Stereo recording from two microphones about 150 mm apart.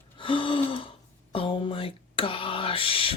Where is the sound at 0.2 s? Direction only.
35° left (ahead or behind).